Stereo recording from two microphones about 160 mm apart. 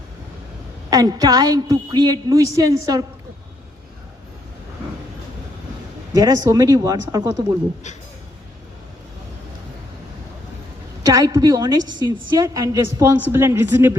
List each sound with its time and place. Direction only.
0.9 s a woman's voice: 25° right (ahead or behind)
6.1 s a woman's voice: 25° right (ahead or behind)
11.0 s a woman's voice: 20° right (ahead or behind)